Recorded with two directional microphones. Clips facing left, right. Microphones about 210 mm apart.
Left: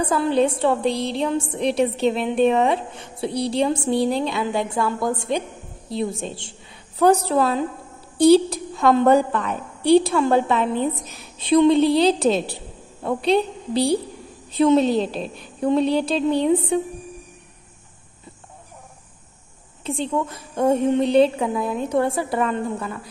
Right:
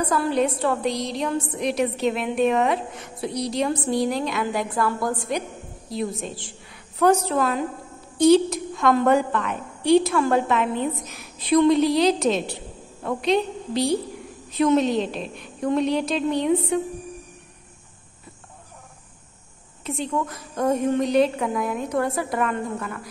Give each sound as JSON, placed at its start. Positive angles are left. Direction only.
{"t": 0.0, "sound": "a woman's voice", "side_deg": 25}
{"t": 19.8, "sound": "a woman's voice", "side_deg": 30}